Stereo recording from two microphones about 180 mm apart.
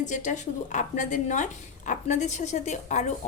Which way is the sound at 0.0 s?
45° left (ahead or behind).